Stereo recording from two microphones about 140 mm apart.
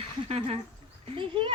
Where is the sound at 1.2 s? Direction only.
35° right (ahead or behind).